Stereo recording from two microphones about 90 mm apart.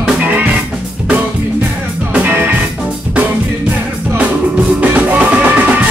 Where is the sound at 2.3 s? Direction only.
20° right (ahead or behind).